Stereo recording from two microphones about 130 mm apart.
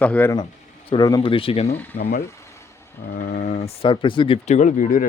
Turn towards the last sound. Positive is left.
turn(degrees=90)